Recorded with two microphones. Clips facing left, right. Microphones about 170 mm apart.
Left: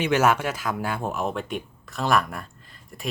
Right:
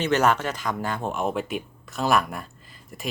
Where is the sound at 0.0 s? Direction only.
10° left (ahead or behind).